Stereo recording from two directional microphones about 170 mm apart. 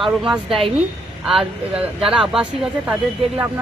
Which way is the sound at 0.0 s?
Centre (ahead or behind).